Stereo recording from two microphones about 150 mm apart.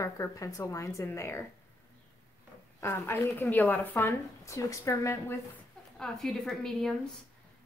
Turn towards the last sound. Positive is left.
turn(degrees=5)  # may be behind; listen again after turning